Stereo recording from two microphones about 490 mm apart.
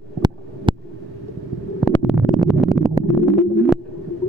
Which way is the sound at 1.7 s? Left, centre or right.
Centre.